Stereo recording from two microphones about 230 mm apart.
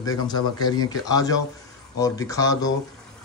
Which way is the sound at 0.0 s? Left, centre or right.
Centre.